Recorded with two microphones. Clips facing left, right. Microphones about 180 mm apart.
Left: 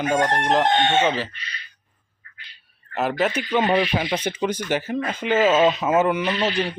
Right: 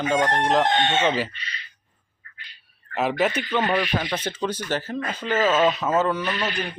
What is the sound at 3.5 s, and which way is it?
Speech, 15° left (ahead or behind).